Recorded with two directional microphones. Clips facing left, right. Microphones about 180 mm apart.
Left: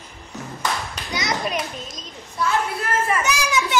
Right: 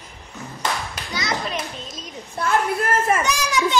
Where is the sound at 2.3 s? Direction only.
50° right (ahead or behind).